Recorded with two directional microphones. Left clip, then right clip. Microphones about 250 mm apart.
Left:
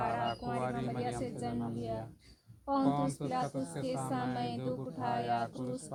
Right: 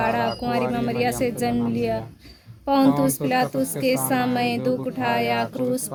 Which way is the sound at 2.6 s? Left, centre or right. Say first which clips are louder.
Right 13 dB; right.